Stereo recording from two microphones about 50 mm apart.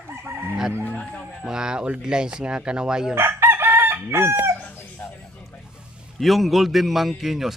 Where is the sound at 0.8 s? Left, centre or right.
Left.